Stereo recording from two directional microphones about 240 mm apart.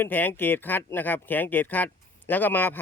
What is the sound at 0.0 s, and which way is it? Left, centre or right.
Speech, centre.